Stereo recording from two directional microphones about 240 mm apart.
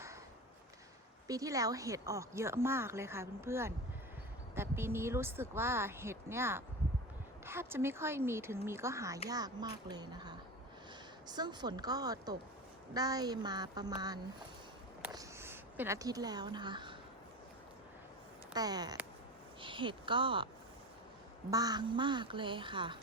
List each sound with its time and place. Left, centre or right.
1.3 s speech: centre
18.5 s speech: centre
21.5 s speech: centre